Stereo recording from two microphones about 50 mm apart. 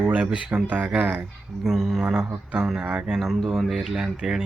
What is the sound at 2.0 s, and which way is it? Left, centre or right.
Speech, right.